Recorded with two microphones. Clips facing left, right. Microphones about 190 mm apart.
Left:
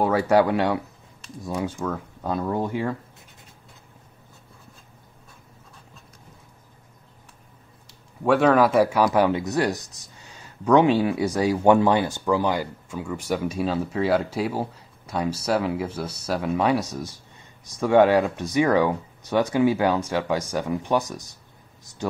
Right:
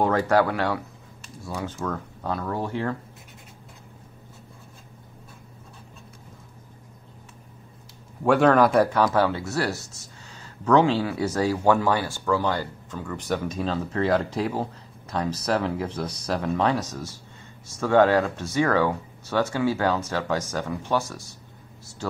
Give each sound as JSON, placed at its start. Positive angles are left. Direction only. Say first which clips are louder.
{"t": 0.0, "sound": "speech", "louder": "left 2 dB", "side_deg": 10}
{"t": 8.2, "sound": "speech", "louder": "even", "side_deg": 0}